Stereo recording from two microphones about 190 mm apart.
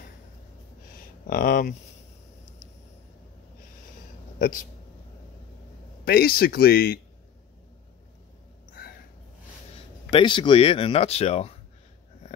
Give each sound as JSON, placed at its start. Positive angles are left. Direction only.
{"t": 1.2, "sound": "speech", "side_deg": 50}
{"t": 6.0, "sound": "speech", "side_deg": 50}
{"t": 10.1, "sound": "speech", "side_deg": 25}